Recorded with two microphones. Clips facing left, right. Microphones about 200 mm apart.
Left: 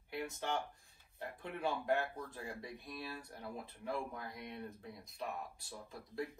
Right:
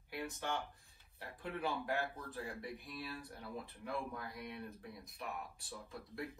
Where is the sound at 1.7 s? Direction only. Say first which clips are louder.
Left 5 dB; 15° left (ahead or behind).